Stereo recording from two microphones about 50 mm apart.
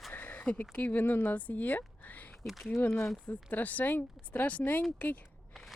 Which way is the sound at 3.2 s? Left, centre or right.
Left.